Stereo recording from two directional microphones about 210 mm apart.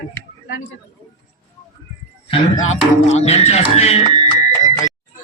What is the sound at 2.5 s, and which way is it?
Speech, 75° left (ahead or behind).